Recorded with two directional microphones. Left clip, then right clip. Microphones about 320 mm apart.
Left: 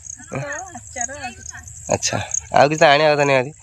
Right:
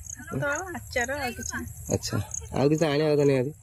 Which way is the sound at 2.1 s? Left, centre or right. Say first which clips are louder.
Left 14 dB; left.